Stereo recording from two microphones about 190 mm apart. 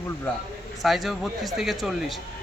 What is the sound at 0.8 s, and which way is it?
A man's voice, centre (ahead or behind).